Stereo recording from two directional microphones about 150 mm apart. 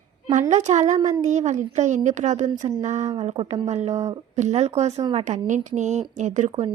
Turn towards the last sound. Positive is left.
turn(degrees=-50)  # may be behind; listen again after turning